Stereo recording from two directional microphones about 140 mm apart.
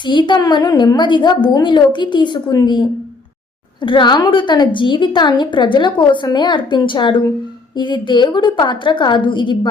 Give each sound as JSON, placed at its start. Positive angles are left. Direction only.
{"t": 0.0, "sound": "a woman's voice", "side_deg": 35}
{"t": 3.8, "sound": "a woman's voice", "side_deg": 35}